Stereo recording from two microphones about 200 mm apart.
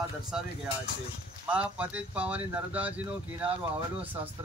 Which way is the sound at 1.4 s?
5° right (ahead or behind).